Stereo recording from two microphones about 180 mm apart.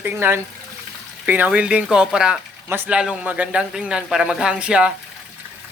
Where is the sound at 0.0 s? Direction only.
10° right (ahead or behind).